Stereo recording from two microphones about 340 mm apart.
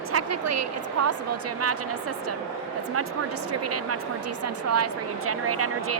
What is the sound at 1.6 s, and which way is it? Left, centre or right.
Speech, right.